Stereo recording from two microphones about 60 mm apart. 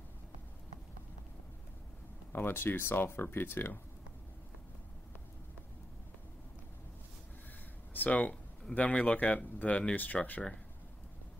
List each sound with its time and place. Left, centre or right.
2.3 s speech: left
7.9 s speech: left